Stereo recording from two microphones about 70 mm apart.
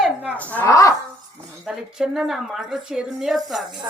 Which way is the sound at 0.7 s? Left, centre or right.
Left.